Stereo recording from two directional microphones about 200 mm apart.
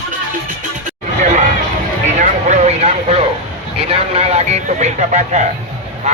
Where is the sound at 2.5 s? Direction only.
35° right (ahead or behind).